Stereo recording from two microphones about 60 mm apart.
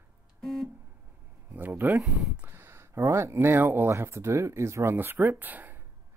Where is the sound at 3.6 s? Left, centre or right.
Right.